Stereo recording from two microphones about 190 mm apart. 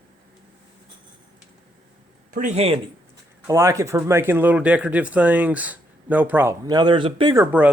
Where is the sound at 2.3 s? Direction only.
40° right (ahead or behind).